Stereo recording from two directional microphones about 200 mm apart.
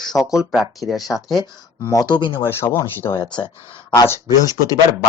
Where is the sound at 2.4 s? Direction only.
10° left (ahead or behind).